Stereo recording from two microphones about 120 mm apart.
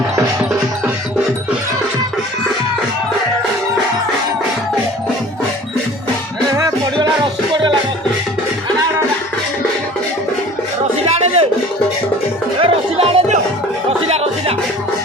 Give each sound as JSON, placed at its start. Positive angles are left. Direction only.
{"t": 11.0, "sound": "music", "side_deg": -55}
{"t": 12.5, "sound": "music", "side_deg": -50}